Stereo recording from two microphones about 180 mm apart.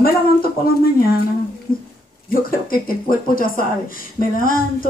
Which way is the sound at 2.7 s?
50° left (ahead or behind).